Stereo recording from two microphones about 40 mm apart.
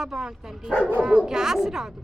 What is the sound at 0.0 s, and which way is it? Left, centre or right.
Speech, centre.